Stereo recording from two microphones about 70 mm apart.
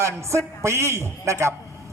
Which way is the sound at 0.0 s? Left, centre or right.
Right.